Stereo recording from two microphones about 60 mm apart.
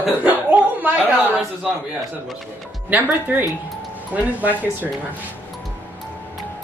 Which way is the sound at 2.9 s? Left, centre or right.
Right.